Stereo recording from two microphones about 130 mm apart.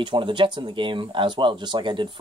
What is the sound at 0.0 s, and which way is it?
Speech, 40° right (ahead or behind).